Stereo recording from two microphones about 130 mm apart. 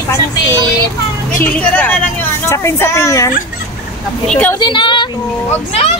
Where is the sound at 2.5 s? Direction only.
25° left (ahead or behind).